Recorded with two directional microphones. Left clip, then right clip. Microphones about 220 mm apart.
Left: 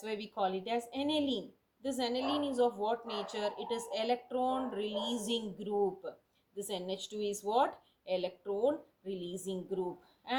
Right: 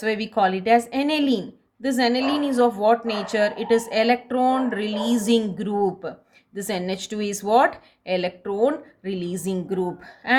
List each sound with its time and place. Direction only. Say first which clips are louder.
0.0 s speech: right 14 dB; 30° right (ahead or behind)